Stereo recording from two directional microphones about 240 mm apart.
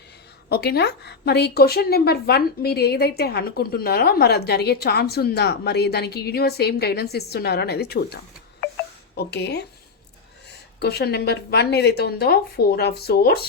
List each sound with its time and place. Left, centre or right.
0.5 s a woman's voice: left
10.8 s a woman's voice: left